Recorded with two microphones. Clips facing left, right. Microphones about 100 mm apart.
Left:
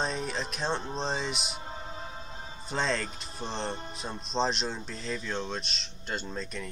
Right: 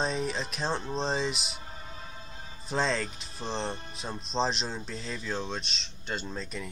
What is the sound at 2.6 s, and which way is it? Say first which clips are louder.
Speech: right 1 dB; centre (ahead or behind).